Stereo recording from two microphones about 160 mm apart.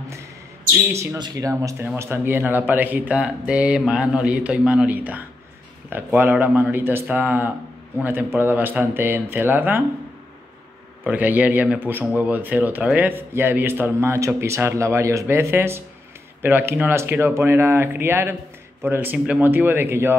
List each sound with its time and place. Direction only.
0.9 s speech: 25° right (ahead or behind)
11.1 s speech: 10° right (ahead or behind)